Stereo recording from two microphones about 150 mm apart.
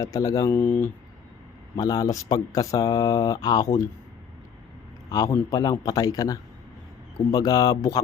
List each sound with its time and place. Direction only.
0.0 s speech: 25° left (ahead or behind)
1.7 s speech: 25° left (ahead or behind)
5.0 s speech: 25° left (ahead or behind)